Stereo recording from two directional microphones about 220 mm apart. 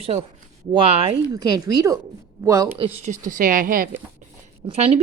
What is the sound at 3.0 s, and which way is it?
Speech, 35° right (ahead or behind).